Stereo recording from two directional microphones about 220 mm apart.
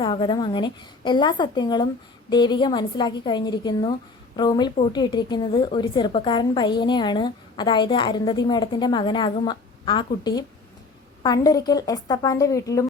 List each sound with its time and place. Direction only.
0.0 s a woman's voice: 20° left (ahead or behind)